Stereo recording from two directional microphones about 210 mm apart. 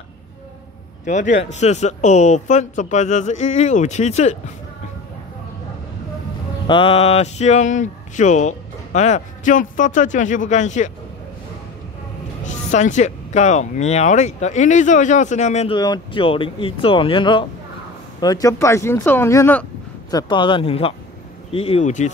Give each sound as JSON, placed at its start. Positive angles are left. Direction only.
{"t": 1.0, "sound": "speech", "side_deg": 35}
{"t": 6.7, "sound": "speech", "side_deg": 25}
{"t": 12.4, "sound": "speech", "side_deg": 35}
{"t": 15.8, "sound": "speech", "side_deg": 20}